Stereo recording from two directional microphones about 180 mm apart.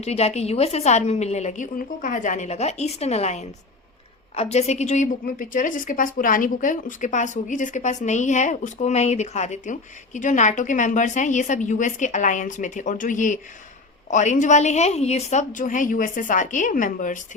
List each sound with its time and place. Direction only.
0.0 s a woman's voice: 35° left (ahead or behind)